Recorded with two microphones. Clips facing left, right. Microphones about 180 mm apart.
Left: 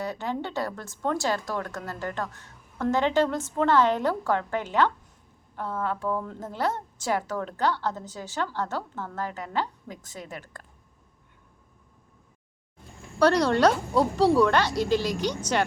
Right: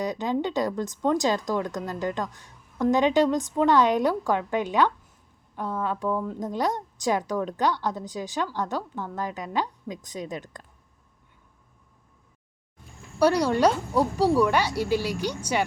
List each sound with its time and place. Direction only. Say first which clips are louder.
0.0 s a woman's voice: right 4 dB; 15° right (ahead or behind)
13.1 s a woman's voice: even; 10° right (ahead or behind)